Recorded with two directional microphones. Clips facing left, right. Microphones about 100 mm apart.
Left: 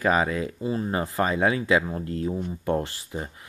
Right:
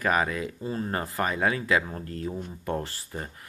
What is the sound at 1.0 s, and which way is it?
Speech, 25° left (ahead or behind).